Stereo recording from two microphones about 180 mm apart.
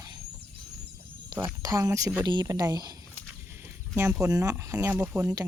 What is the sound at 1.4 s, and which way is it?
Speech, 20° right (ahead or behind).